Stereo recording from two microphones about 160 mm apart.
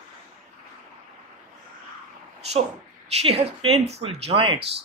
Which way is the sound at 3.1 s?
40° right (ahead or behind).